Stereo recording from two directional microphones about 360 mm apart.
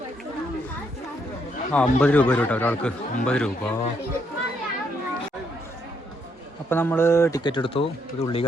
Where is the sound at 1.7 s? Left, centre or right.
Centre.